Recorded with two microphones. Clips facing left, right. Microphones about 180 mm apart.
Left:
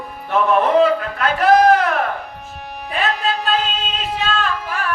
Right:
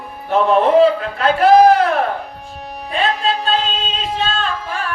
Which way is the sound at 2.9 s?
30° right (ahead or behind).